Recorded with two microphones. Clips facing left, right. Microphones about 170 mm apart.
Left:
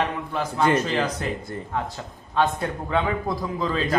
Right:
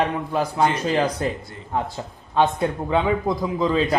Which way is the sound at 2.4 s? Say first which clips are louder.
Right 3 dB; 25° right (ahead or behind).